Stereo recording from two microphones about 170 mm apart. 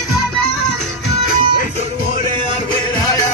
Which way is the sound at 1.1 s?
60° left (ahead or behind).